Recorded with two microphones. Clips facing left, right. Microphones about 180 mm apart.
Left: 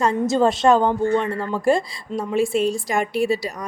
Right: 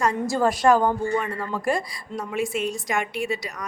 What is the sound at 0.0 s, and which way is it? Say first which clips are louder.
A woman's voice: left 4 dB; 25° left (ahead or behind).